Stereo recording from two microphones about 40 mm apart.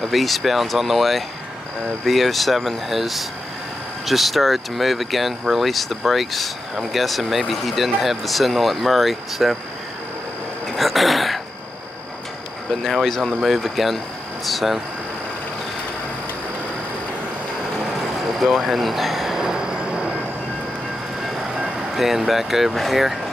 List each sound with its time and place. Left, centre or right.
0.1 s speech: centre
10.8 s a sound: centre
13.4 s speech: centre
18.4 s speech: centre
19.3 s vehicle: centre
19.9 s train: right
21.6 s speech: centre